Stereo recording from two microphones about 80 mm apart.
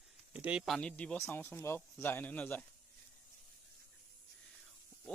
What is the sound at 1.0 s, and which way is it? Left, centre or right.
Speech, centre.